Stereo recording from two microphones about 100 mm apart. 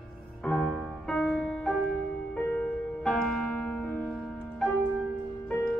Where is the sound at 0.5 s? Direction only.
10° right (ahead or behind).